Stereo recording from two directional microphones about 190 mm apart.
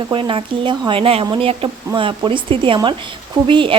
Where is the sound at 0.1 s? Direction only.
25° right (ahead or behind).